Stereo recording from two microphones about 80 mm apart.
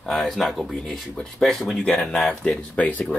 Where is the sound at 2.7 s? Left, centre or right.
Centre.